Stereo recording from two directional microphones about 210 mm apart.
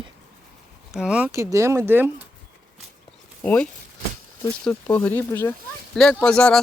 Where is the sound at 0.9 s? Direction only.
5° right (ahead or behind).